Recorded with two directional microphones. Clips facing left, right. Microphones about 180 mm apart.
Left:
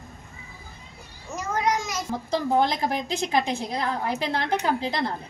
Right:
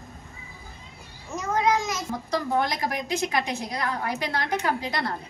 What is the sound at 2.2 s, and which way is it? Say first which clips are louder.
A woman's voice: left 3 dB; 25° left (ahead or behind).